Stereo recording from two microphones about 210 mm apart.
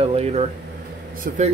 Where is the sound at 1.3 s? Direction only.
40° right (ahead or behind).